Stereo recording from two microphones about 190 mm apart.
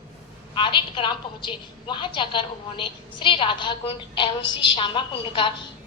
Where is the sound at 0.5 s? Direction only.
25° left (ahead or behind).